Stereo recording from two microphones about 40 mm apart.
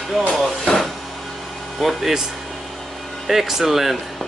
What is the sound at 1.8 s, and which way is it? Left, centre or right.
Speech, centre.